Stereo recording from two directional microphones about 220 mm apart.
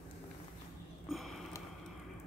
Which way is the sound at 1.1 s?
Centre (ahead or behind).